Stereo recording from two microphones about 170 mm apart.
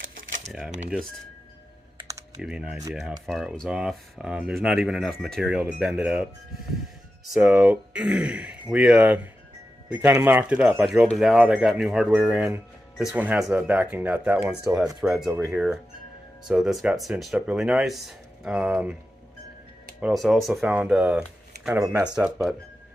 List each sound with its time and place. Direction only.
0.0 s a sound: 50° right (ahead or behind)
0.8 s speech: centre (ahead or behind)
2.4 s speech: 5° right (ahead or behind)
7.3 s speech: 10° right (ahead or behind)
20.0 s speech: 5° right (ahead or behind)